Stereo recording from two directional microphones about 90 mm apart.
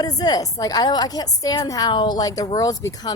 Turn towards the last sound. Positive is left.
turn(degrees=45)  # may be behind; listen again after turning